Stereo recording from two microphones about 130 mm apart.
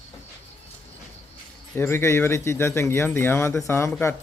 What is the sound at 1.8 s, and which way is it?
Speech, 20° left (ahead or behind).